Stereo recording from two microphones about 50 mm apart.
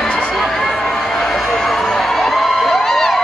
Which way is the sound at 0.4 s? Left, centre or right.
Centre.